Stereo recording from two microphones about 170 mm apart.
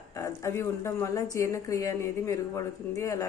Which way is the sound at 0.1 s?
15° left (ahead or behind).